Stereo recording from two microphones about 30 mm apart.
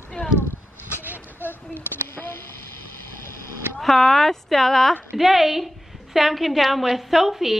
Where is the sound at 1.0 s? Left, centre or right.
Right.